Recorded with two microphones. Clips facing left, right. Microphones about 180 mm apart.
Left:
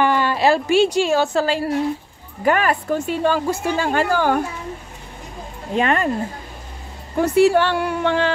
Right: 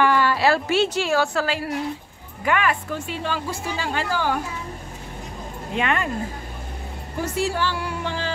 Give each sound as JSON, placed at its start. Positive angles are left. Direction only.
{"t": 0.0, "sound": "a woman's voice", "side_deg": 20}
{"t": 2.4, "sound": "a woman's voice", "side_deg": 40}
{"t": 5.8, "sound": "speech", "side_deg": 40}
{"t": 7.2, "sound": "a woman's voice", "side_deg": 60}